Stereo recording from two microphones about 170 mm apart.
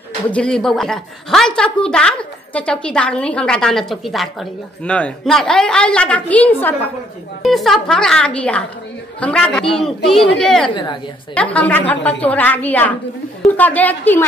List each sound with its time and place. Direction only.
0.3 s a woman's voice: 5° left (ahead or behind)
10.7 s a woman's voice: 25° left (ahead or behind)
11.3 s a woman's voice: 5° left (ahead or behind)